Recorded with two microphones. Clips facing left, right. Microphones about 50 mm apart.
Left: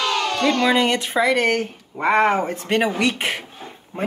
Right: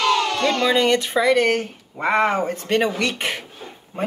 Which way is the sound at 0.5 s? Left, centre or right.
Centre.